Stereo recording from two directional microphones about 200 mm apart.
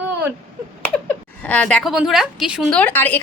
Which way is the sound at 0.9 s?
5° left (ahead or behind).